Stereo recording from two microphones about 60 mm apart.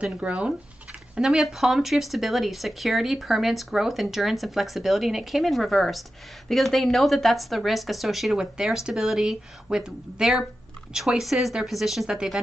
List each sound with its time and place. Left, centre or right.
0.0 s speech: centre
1.2 s speech: centre